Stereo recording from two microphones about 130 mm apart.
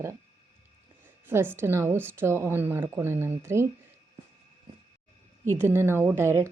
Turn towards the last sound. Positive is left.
turn(degrees=-20)  # may be behind; listen again after turning